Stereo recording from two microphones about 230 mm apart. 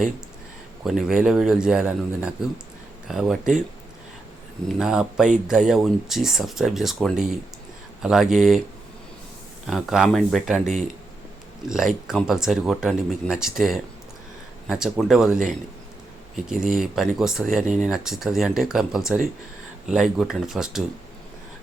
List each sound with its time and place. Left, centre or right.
0.9 s speech: centre
4.8 s speech: centre
9.6 s speech: centre
16.5 s speech: centre